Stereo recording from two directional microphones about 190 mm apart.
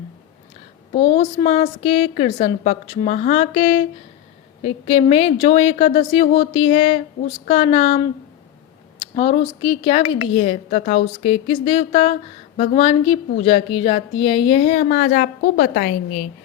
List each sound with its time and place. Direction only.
0.9 s speech: 25° left (ahead or behind)
9.1 s speech: 30° left (ahead or behind)